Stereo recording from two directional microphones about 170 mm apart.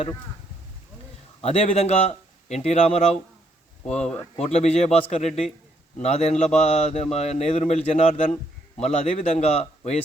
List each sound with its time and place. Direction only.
1.4 s a man's voice: 35° left (ahead or behind)